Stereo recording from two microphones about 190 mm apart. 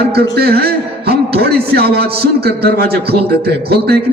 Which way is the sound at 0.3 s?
55° right (ahead or behind).